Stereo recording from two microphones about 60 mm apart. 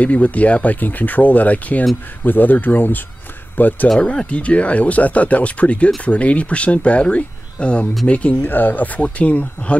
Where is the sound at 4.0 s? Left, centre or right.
Centre.